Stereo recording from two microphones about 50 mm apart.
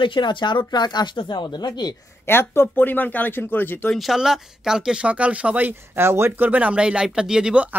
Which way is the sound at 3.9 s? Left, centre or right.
Centre.